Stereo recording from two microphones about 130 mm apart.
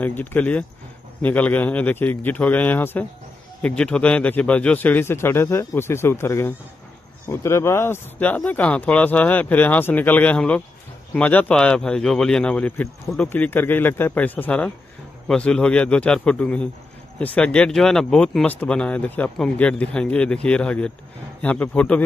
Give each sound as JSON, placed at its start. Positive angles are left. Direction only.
{"t": 0.0, "sound": "speech", "side_deg": 15}